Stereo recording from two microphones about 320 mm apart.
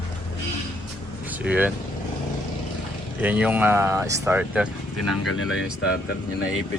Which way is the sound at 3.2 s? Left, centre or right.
Centre.